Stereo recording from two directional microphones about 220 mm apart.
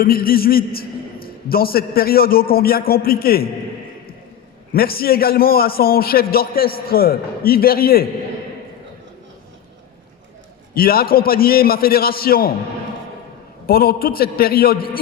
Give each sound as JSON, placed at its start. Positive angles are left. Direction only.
{"t": 0.0, "sound": "a man's voice", "side_deg": 40}
{"t": 4.7, "sound": "a man's voice", "side_deg": 45}
{"t": 10.8, "sound": "a man's voice", "side_deg": 45}
{"t": 13.7, "sound": "a man's voice", "side_deg": 45}